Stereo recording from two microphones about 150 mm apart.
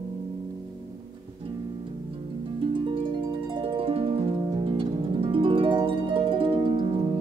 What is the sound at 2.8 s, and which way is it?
Harp, 35° right (ahead or behind).